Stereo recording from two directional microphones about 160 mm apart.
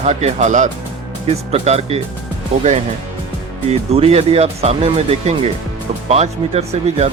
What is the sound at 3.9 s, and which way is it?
Speech, 40° right (ahead or behind).